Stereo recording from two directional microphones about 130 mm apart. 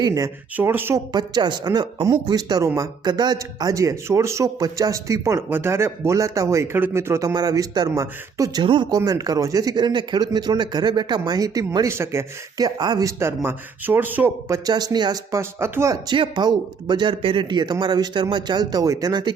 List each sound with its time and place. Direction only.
0.0 s speech: 25° right (ahead or behind)
1.1 s speech: 35° right (ahead or behind)
8.6 s speech: 40° right (ahead or behind)
9.0 s speech: 25° right (ahead or behind)
16.1 s speech: 40° right (ahead or behind)